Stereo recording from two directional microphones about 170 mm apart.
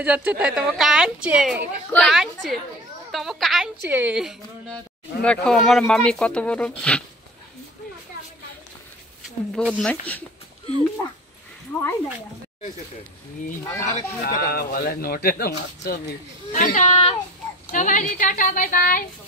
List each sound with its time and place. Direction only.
0.0 s speech: 5° right (ahead or behind)
3.8 s speech: 10° right (ahead or behind); by 7.0 s 5° left (ahead or behind)
9.6 s speech: centre (ahead or behind)
13.7 s speech: 55° left (ahead or behind)
16.5 s speech: 50° left (ahead or behind)
17.6 s speech: 50° left (ahead or behind)